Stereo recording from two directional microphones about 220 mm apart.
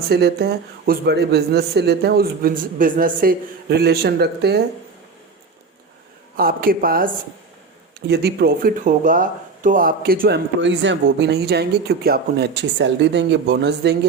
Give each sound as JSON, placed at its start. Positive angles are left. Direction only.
{"t": 0.1, "sound": "speech", "side_deg": -45}
{"t": 6.3, "sound": "a woman's voice", "side_deg": -40}